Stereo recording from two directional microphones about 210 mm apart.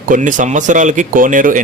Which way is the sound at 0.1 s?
40° right (ahead or behind).